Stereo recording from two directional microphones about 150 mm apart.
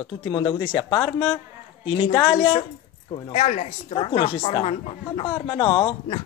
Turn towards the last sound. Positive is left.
turn(degrees=30)  # may be behind; listen again after turning